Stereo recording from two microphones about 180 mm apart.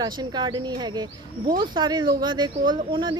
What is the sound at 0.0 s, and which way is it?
Speech, 25° right (ahead or behind).